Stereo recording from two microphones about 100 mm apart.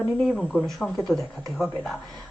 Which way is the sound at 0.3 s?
5° left (ahead or behind).